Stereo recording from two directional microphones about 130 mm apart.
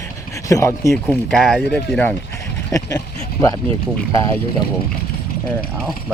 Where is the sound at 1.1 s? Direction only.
5° left (ahead or behind).